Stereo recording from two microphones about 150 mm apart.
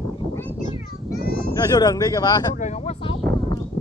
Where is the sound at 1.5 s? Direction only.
25° left (ahead or behind).